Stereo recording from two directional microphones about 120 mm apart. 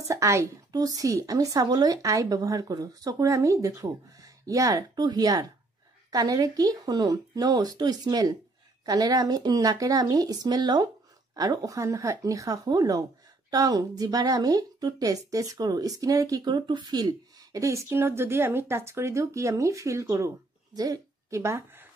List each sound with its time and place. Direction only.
0.1 s a woman's voice: 25° right (ahead or behind)